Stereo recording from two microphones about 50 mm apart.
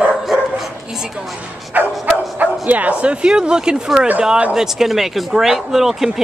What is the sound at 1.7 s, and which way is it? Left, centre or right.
Speech, right.